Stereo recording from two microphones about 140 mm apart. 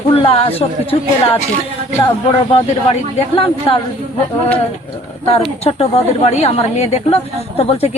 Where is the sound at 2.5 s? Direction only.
40° left (ahead or behind).